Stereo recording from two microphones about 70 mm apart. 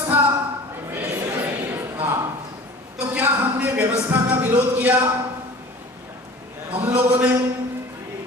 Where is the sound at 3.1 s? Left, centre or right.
Right.